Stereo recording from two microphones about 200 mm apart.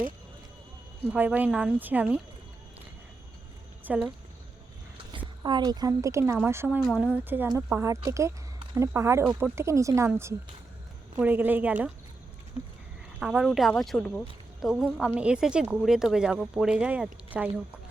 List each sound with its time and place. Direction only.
1.0 s a woman's voice: 10° right (ahead or behind)
3.8 s a woman's voice: 5° right (ahead or behind)
5.1 s a woman's voice: 20° right (ahead or behind)
13.1 s speech: 5° right (ahead or behind)